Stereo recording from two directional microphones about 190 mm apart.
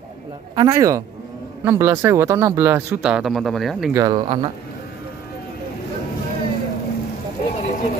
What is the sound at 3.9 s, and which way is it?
Speech, 20° right (ahead or behind).